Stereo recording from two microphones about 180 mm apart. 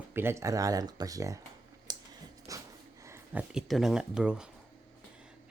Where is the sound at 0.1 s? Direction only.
15° right (ahead or behind).